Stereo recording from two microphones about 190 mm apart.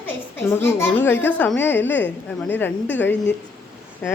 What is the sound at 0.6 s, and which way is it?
A woman's voice, 10° left (ahead or behind).